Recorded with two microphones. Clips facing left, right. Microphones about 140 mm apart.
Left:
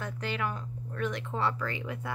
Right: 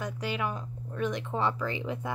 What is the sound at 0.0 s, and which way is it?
Speech, 15° right (ahead or behind).